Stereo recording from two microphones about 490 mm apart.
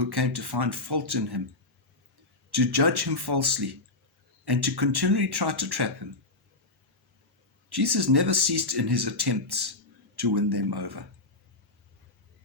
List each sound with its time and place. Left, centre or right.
0.0 s speech: right
2.5 s speech: right
7.7 s speech: right